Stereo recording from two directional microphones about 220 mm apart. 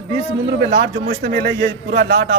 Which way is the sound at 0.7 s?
45° right (ahead or behind).